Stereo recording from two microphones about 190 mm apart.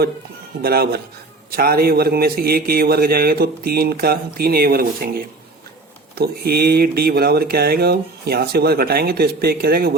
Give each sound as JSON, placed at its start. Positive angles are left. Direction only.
{"t": 0.6, "sound": "a man's voice", "side_deg": -55}